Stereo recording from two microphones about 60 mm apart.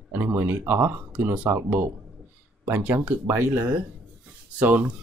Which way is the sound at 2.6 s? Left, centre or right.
Right.